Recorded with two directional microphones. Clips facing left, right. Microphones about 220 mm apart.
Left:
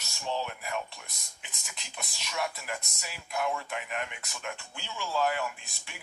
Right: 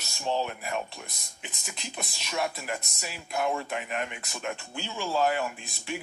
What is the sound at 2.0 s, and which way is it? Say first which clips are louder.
Speech: right 3 dB; 35° right (ahead or behind).